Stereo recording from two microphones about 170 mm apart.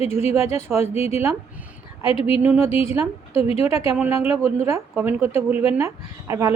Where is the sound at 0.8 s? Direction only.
40° left (ahead or behind).